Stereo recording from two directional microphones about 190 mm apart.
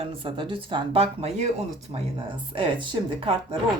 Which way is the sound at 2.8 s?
25° right (ahead or behind).